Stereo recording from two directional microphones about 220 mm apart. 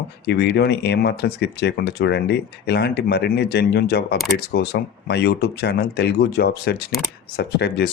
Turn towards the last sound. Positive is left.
turn(degrees=50)  # may be behind; listen again after turning